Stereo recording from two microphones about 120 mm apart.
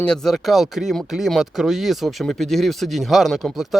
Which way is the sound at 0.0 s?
5° left (ahead or behind).